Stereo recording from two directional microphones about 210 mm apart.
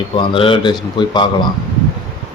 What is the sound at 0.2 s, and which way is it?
A man's voice, 25° left (ahead or behind).